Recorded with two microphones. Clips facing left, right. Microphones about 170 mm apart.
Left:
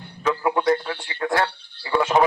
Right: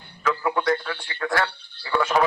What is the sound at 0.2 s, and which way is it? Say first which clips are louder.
Speech: left 2 dB; 25° left (ahead or behind).